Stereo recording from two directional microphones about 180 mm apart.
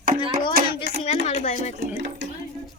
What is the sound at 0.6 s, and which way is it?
Hands, 55° right (ahead or behind).